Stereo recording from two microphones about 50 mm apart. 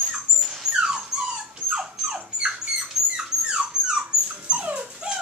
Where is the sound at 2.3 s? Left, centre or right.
Centre.